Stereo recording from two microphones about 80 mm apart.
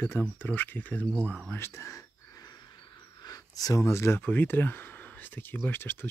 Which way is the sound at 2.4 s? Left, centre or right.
Left.